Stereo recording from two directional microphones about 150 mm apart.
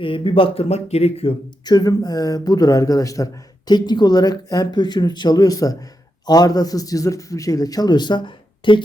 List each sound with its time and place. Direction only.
0.0 s speech: 35° left (ahead or behind)
1.6 s speech: 25° left (ahead or behind)